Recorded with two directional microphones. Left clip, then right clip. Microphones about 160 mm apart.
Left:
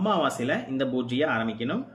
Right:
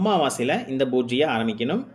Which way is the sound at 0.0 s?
30° right (ahead or behind).